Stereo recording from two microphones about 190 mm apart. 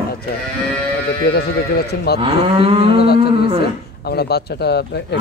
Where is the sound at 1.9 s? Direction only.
55° left (ahead or behind).